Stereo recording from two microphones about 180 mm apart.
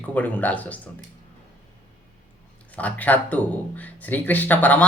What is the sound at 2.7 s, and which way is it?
Speech, 10° left (ahead or behind).